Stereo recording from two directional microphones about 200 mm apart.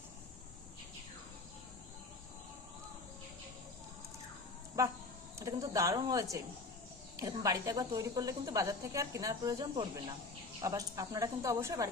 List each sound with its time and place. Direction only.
5.4 s speech: 15° right (ahead or behind)